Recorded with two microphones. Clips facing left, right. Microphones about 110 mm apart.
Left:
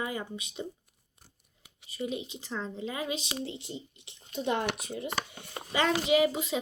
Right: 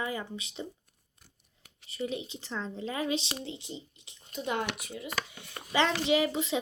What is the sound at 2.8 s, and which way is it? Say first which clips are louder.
Speech: right 4 dB; 15° left (ahead or behind).